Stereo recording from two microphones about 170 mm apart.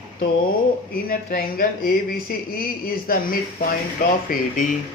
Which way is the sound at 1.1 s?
60° left (ahead or behind).